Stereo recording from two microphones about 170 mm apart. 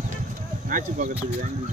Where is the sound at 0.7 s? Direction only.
50° right (ahead or behind).